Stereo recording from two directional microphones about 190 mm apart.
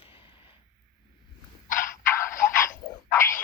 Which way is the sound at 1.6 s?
45° left (ahead or behind).